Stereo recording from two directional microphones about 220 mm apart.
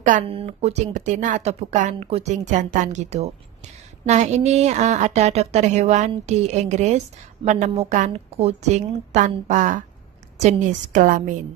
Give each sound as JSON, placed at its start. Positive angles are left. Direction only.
{"t": 0.0, "sound": "a woman's voice", "side_deg": -30}